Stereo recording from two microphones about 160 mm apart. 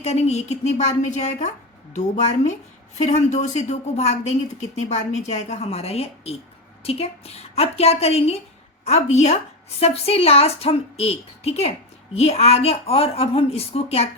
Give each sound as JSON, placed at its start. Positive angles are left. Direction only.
{"t": 0.0, "sound": "a woman's voice", "side_deg": 40}